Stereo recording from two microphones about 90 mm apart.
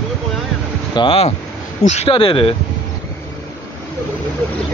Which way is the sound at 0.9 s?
65° left (ahead or behind).